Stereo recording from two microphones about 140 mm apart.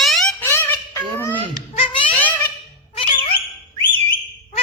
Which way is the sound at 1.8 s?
40° left (ahead or behind).